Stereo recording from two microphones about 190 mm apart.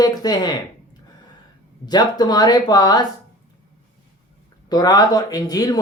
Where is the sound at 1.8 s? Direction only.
20° left (ahead or behind).